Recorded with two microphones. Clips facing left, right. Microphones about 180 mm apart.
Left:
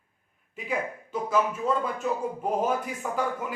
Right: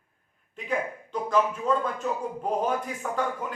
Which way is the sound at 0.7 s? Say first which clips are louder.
Right 1 dB; 5° left (ahead or behind).